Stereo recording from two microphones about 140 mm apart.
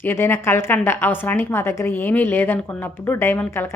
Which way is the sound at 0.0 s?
15° left (ahead or behind).